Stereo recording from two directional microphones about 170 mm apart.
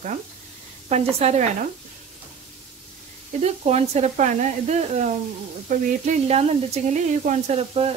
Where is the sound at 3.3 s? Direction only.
40° right (ahead or behind).